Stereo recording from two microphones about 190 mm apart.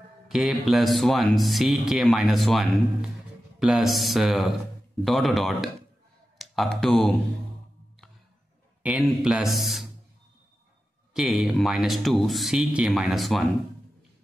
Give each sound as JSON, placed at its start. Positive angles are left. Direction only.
{"t": 0.3, "sound": "speech", "side_deg": 0}
{"t": 8.8, "sound": "speech", "side_deg": -5}
{"t": 11.1, "sound": "speech", "side_deg": 0}